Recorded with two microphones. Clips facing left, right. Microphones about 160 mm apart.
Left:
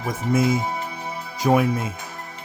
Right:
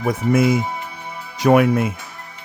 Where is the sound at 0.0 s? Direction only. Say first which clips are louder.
Right 4 dB; 65° right (ahead or behind).